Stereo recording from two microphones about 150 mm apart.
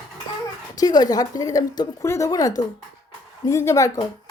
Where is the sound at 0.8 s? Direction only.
25° left (ahead or behind).